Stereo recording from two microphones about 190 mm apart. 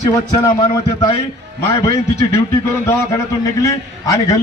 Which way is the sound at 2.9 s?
15° left (ahead or behind).